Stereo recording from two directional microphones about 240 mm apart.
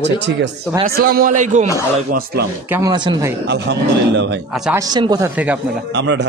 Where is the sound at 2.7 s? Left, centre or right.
Centre.